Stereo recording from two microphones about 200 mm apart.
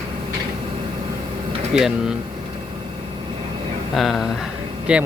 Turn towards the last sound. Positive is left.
turn(degrees=-5)  # may be behind; listen again after turning